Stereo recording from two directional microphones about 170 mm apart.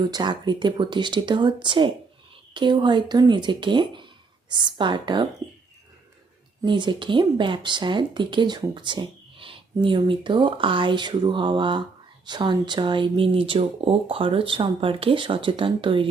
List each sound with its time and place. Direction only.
0.1 s speech: 25° right (ahead or behind)
6.6 s speech: 25° right (ahead or behind)